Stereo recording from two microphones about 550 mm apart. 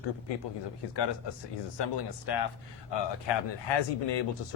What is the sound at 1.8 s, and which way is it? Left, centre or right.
Speech, left.